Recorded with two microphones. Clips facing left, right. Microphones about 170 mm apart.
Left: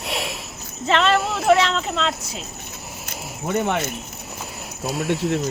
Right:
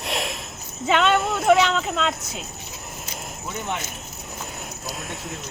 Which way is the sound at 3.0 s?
65° left (ahead or behind).